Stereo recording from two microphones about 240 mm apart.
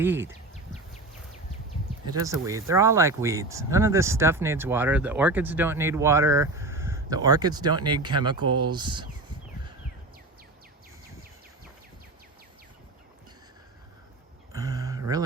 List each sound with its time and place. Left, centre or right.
0.0 s speech: centre
2.5 s speech: centre
14.5 s a sound: centre